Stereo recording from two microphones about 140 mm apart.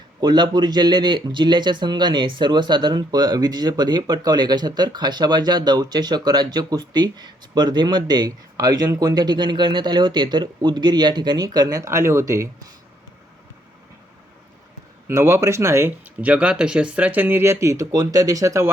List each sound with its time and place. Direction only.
0.2 s speech: 30° right (ahead or behind)
15.0 s speech: 20° right (ahead or behind)